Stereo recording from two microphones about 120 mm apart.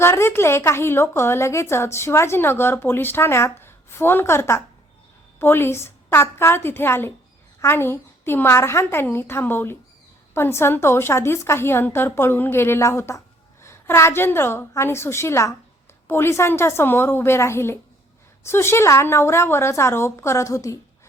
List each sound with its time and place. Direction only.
0.0 s a woman's voice: 20° left (ahead or behind)